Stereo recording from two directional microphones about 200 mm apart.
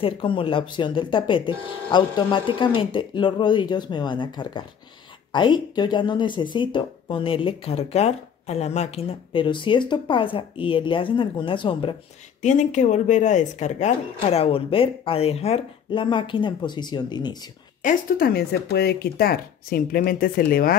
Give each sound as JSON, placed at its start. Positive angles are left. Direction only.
{"t": 0.0, "sound": "speech", "side_deg": 25}
{"t": 12.4, "sound": "speech", "side_deg": 35}
{"t": 17.8, "sound": "speech", "side_deg": 45}